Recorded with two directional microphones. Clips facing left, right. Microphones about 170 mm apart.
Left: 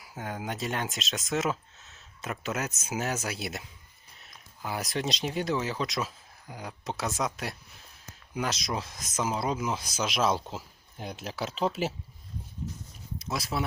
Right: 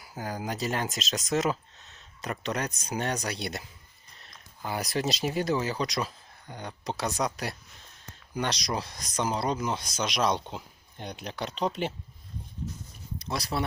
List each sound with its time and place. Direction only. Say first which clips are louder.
0.0 s speech: right 2 dB; centre (ahead or behind)
13.1 s speech: right 1 dB; 5° left (ahead or behind)